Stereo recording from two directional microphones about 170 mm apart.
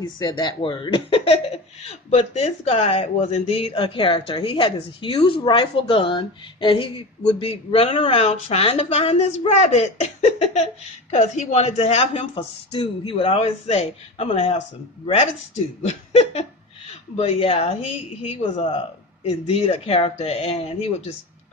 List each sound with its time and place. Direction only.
0.0 s speech: 25° left (ahead or behind)
15.8 s speech: 40° left (ahead or behind)